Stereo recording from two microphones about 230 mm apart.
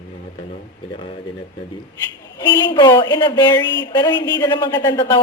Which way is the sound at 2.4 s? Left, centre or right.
Centre.